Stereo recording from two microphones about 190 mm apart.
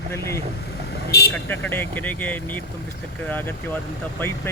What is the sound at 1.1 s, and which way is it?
Speech, 60° left (ahead or behind).